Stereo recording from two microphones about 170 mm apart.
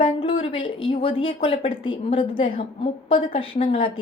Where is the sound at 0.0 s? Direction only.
30° left (ahead or behind).